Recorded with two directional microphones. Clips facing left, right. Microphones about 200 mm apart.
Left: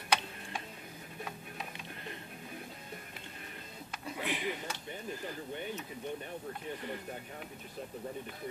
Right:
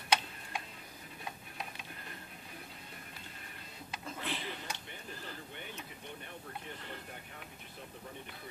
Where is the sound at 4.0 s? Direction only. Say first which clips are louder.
Left 5 dB; 15° left (ahead or behind).